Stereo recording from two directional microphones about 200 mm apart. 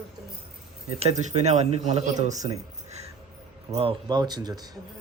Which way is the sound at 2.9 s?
35° right (ahead or behind).